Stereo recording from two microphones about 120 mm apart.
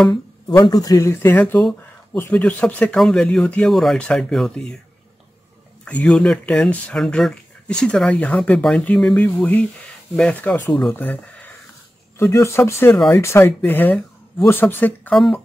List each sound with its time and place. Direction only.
0.7 s speech: 30° left (ahead or behind); by 4.7 s 5° left (ahead or behind)
5.9 s speech: 10° left (ahead or behind)